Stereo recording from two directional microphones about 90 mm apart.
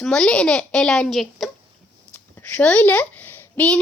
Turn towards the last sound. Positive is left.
turn(degrees=20)  # may be behind; listen again after turning